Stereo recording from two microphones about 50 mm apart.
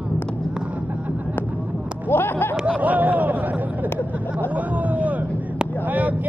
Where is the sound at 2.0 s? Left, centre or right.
Left.